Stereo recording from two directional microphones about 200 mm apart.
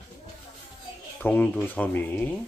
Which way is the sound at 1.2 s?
10° left (ahead or behind).